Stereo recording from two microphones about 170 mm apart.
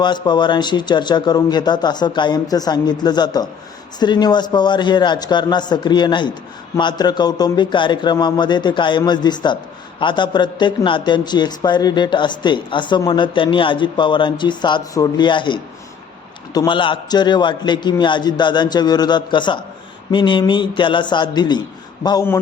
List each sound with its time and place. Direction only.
0.0 s a man's voice: 25° left (ahead or behind)